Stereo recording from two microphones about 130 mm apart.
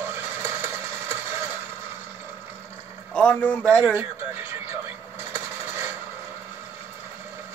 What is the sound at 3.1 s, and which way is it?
Speech, 10° left (ahead or behind).